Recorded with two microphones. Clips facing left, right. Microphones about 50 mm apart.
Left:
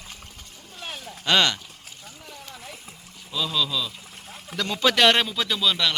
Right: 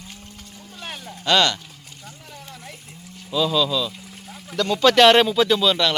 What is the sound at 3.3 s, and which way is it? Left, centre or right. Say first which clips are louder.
Speech: right 6 dB; centre.